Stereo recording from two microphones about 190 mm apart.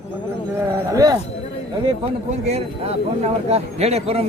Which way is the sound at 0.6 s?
20° right (ahead or behind).